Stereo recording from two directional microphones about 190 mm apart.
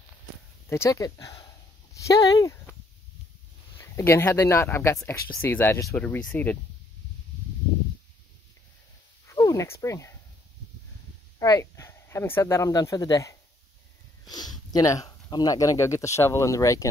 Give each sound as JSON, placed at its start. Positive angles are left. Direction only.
{"t": 0.7, "sound": "speech", "side_deg": 15}
{"t": 3.7, "sound": "speech", "side_deg": 15}
{"t": 9.3, "sound": "a sound", "side_deg": 15}
{"t": 11.3, "sound": "speech", "side_deg": 15}